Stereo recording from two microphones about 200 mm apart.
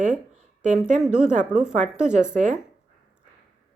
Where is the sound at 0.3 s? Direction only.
40° right (ahead or behind).